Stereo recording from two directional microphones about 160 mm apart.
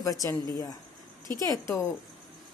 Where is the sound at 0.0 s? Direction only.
20° left (ahead or behind).